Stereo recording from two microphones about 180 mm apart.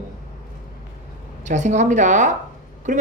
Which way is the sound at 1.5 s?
40° right (ahead or behind).